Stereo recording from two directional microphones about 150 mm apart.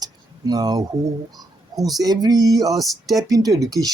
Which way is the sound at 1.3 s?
25° right (ahead or behind).